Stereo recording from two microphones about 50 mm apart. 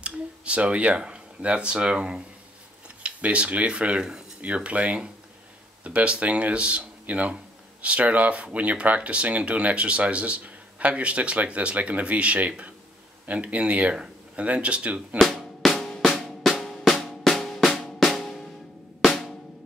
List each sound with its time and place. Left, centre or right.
0.0 s speech: right
15.1 s drum: centre